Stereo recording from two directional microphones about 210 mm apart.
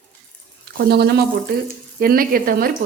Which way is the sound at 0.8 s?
50° right (ahead or behind).